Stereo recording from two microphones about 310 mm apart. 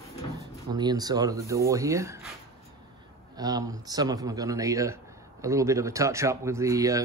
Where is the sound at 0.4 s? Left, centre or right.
Centre.